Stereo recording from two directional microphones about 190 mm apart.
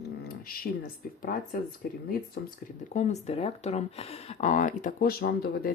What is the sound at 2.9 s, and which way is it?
Speech, 35° left (ahead or behind).